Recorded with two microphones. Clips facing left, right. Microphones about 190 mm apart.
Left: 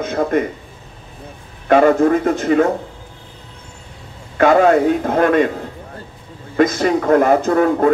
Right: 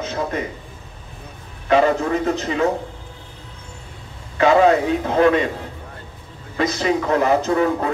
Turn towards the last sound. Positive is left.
turn(degrees=50)  # may be behind; listen again after turning